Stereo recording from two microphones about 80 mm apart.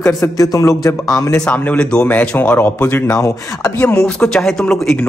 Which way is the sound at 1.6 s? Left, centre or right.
Centre.